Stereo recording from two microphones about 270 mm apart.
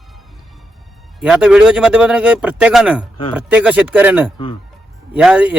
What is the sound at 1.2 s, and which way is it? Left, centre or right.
Speech, centre.